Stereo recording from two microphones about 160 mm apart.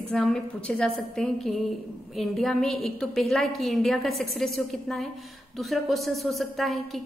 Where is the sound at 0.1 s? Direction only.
5° left (ahead or behind).